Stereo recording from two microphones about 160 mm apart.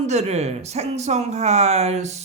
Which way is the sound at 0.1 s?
45° right (ahead or behind).